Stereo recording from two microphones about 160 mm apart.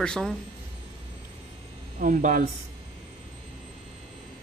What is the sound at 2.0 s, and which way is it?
Speech, 55° right (ahead or behind).